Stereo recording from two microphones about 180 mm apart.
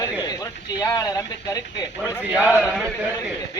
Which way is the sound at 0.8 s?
20° left (ahead or behind).